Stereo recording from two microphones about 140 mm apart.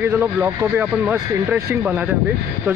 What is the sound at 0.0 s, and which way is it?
Speech, 15° right (ahead or behind).